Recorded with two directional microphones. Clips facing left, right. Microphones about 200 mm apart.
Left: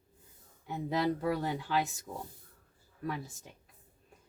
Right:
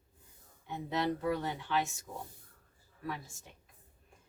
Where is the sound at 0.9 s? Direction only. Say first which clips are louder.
Left 2 dB; 35° left (ahead or behind).